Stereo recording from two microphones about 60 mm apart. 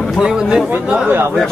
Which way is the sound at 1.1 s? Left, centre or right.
Right.